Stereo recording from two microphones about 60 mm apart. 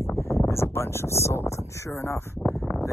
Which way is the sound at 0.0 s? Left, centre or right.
Left.